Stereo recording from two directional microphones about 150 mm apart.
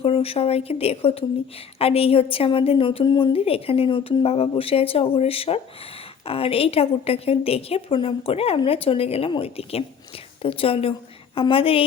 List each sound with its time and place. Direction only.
0.0 s a woman's voice: 40° left (ahead or behind)